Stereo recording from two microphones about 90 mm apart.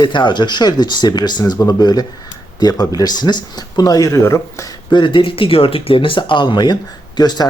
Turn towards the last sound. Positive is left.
turn(degrees=50)  # may be behind; listen again after turning